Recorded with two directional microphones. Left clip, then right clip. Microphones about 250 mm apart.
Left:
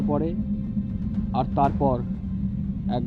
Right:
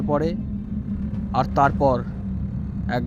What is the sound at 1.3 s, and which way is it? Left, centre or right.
Speech, right.